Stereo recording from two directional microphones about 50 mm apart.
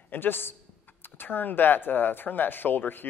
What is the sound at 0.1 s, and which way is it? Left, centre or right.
Speech, left.